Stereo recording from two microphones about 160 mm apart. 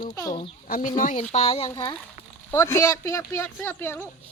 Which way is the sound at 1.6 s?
25° left (ahead or behind).